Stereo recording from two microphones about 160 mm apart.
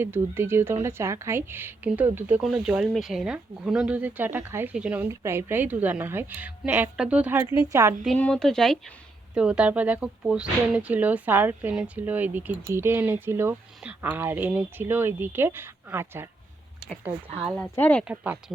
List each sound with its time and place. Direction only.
0.0 s a woman's voice: 15° right (ahead or behind)
8.0 s a woman's voice: 5° left (ahead or behind); by 16.3 s 15° right (ahead or behind)
17.4 s speech: 10° left (ahead or behind)
18.0 s a woman's voice: 10° right (ahead or behind)